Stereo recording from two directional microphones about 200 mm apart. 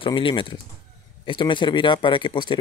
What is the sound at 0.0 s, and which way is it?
Speech, 25° left (ahead or behind).